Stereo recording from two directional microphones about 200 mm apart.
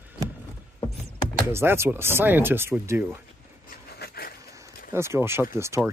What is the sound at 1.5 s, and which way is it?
Speech, 10° right (ahead or behind).